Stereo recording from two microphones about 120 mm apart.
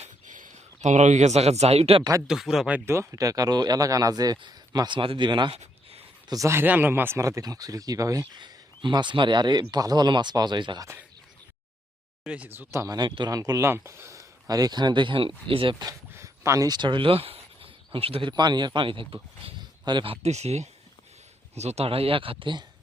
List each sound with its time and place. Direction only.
0.0 s a sound: 90° right; by 2.0 s 55° right (ahead or behind)
2.2 s speech: 5° right (ahead or behind); by 5.5 s 40° right (ahead or behind)
6.2 s speech: 30° right (ahead or behind)
12.2 s speech: 10° right (ahead or behind)
12.8 s speech: 35° right (ahead or behind)
15.9 s speech: 25° right (ahead or behind); by 20.1 s 40° right (ahead or behind)
20.2 s speech: 65° right (ahead or behind); by 22.6 s 45° right (ahead or behind)